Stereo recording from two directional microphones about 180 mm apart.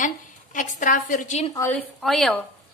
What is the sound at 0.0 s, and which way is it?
A woman's voice, 45° left (ahead or behind).